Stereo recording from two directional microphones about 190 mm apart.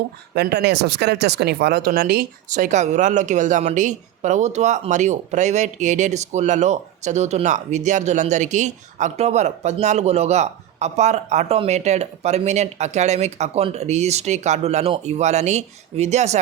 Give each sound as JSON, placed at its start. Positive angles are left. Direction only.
{"t": 0.3, "sound": "speech", "side_deg": -60}